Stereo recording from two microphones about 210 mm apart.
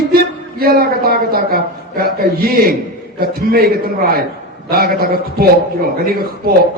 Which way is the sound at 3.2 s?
45° right (ahead or behind).